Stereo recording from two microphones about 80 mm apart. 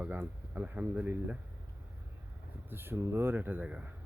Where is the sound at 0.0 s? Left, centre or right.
Right.